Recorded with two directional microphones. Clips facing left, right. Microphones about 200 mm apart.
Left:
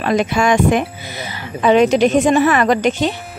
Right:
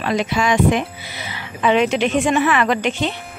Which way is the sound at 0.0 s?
50° left (ahead or behind).